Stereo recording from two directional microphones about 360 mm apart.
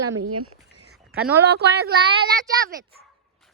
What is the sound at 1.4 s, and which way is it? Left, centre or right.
Speech, right.